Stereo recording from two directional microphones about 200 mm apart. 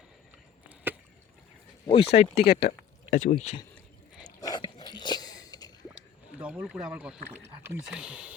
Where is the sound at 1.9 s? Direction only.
30° left (ahead or behind).